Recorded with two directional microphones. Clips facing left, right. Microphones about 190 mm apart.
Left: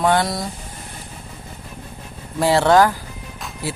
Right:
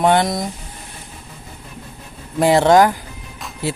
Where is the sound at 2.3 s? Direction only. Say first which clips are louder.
Right 2 dB; 20° right (ahead or behind).